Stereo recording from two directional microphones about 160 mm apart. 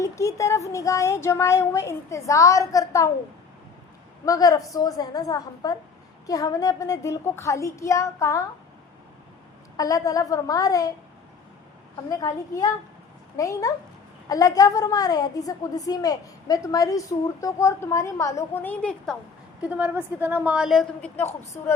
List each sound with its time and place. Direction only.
0.0 s a woman's voice: 20° left (ahead or behind)
4.3 s a woman's voice: 25° left (ahead or behind)
9.7 s a woman's voice: 20° left (ahead or behind)
12.1 s a woman's voice: 25° left (ahead or behind); by 19.1 s 10° left (ahead or behind)
19.6 s a woman's voice: 10° right (ahead or behind)
21.2 s a woman's voice: 15° left (ahead or behind)